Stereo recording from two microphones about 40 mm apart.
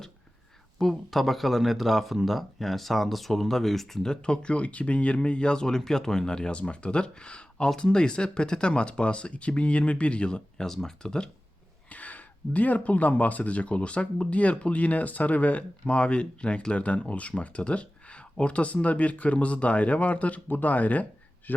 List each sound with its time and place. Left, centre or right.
0.8 s speech: centre
4.0 s speech: centre
11.9 s speech: left
15.9 s speech: left